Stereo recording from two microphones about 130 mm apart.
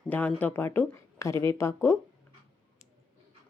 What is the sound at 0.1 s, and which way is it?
Speech, 15° left (ahead or behind).